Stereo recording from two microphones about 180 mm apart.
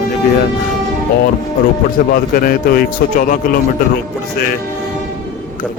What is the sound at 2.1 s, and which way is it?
A man's voice, 55° left (ahead or behind).